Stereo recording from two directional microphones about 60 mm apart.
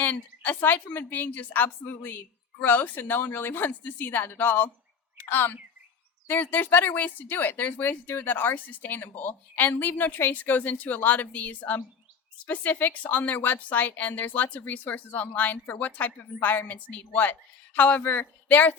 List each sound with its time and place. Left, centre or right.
0.0 s a woman's voice: left